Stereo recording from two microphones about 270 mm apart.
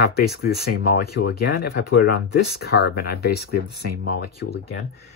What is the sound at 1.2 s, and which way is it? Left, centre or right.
Speech, left.